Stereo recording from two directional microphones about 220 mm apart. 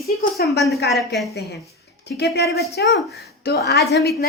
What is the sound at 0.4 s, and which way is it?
Speech, 45° left (ahead or behind).